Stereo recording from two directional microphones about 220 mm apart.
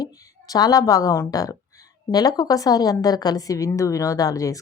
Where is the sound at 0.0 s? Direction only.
15° left (ahead or behind).